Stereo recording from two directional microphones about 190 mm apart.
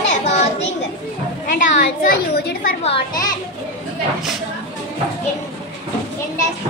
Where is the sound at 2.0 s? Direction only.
55° left (ahead or behind).